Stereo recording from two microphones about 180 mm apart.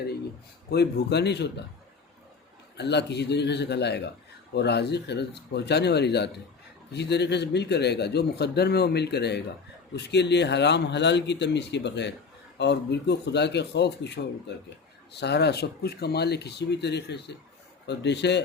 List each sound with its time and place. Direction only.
0.7 s a man's voice: 65° left (ahead or behind)
2.7 s a man's voice: 70° left (ahead or behind)